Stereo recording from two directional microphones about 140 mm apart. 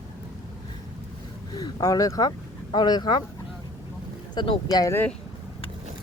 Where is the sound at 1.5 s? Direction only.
25° left (ahead or behind).